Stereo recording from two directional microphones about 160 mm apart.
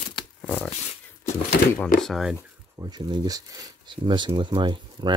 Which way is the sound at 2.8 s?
25° right (ahead or behind).